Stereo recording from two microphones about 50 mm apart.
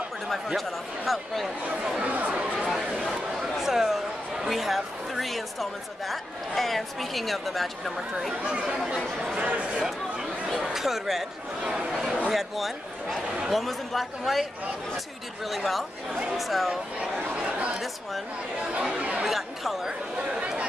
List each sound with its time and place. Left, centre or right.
0.3 s speech: centre
2.0 s chatter: right
2.6 s speech: centre
9.2 s speech: centre
9.8 s a sound: centre
10.6 s speech: centre
12.3 s speech: centre
15.4 s speech: centre
17.4 s chatter: right
18.7 s speech: centre
19.2 s speech: centre